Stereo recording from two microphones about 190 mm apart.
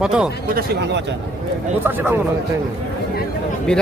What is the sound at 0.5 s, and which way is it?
Speech, 60° right (ahead or behind).